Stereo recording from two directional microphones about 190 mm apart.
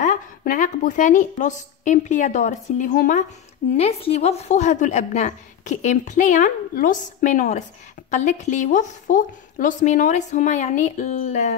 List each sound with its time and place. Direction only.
0.0 s a woman's voice: 45° left (ahead or behind)
3.7 s a woman's voice: 30° left (ahead or behind)